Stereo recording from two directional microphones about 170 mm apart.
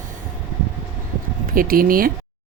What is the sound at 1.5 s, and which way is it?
Speech, 55° right (ahead or behind).